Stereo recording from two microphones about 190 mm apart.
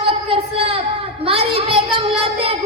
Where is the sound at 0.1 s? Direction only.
30° right (ahead or behind).